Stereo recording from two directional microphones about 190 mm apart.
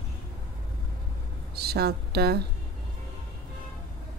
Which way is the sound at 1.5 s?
55° right (ahead or behind).